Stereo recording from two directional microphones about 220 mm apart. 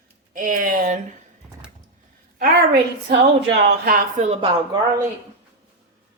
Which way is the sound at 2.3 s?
45° right (ahead or behind).